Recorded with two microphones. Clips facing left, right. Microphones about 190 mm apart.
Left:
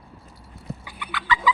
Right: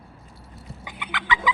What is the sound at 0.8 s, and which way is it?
Chicken, 20° right (ahead or behind).